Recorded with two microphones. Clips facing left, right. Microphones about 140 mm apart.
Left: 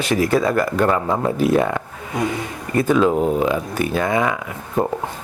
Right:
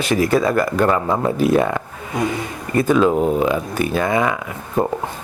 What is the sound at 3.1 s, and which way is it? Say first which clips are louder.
Speech: right 1 dB; 40° right (ahead or behind).